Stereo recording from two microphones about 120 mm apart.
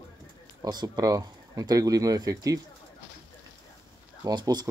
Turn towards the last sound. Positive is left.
turn(degrees=-35)  # may be behind; listen again after turning